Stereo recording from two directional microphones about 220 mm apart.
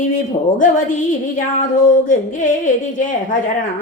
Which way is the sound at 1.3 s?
35° left (ahead or behind).